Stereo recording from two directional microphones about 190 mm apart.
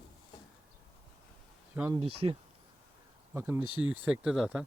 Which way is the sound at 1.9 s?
30° right (ahead or behind).